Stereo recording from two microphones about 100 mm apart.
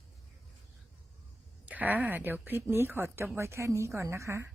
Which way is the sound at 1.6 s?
15° right (ahead or behind).